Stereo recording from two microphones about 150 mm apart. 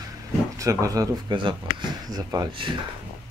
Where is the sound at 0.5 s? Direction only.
20° right (ahead or behind).